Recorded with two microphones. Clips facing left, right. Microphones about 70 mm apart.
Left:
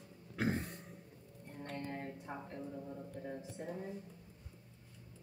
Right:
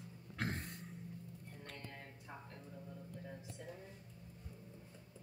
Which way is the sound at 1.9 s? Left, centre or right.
Left.